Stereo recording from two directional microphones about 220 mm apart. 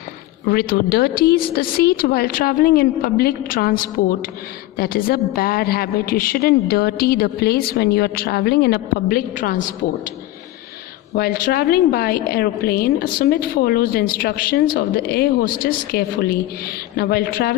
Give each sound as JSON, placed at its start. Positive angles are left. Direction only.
{"t": 0.4, "sound": "a woman's voice", "side_deg": 45}
{"t": 11.1, "sound": "a woman's voice", "side_deg": 45}